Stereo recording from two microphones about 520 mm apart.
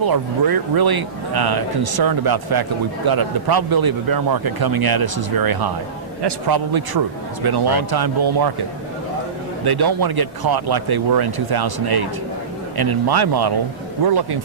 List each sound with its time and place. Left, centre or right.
0.0 s a man's voice: right
9.7 s a man's voice: right